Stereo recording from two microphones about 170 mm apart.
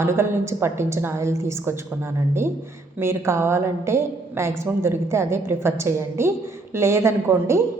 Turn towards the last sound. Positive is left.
turn(degrees=-15)  # may be behind; listen again after turning